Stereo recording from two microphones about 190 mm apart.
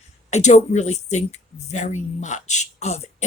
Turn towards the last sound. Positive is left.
turn(degrees=35)  # may be behind; listen again after turning